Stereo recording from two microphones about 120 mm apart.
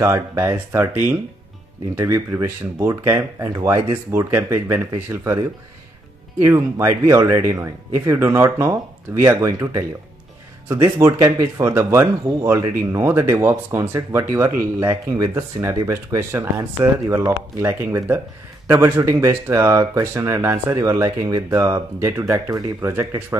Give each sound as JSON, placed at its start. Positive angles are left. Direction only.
{"t": 0.0, "sound": "speech", "side_deg": -25}
{"t": 6.4, "sound": "speech", "side_deg": -25}